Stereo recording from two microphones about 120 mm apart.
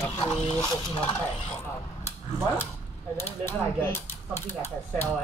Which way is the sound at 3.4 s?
20° left (ahead or behind).